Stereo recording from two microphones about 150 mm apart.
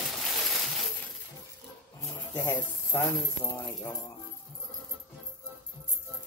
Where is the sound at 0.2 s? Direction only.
Centre (ahead or behind).